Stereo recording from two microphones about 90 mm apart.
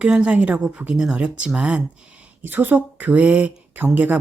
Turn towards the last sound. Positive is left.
turn(degrees=-20)  # may be behind; listen again after turning